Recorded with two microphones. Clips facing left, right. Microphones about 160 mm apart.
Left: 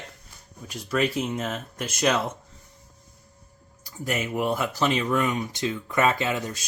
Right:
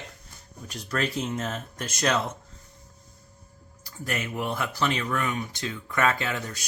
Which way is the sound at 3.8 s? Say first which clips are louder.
Left 3 dB; 15° left (ahead or behind).